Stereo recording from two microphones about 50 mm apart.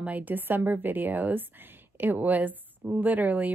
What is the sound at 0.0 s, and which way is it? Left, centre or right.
A woman's voice, right.